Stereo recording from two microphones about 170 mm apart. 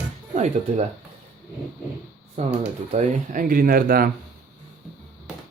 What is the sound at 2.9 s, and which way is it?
Speech, 50° right (ahead or behind).